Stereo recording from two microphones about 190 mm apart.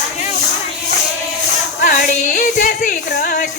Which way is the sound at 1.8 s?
45° left (ahead or behind).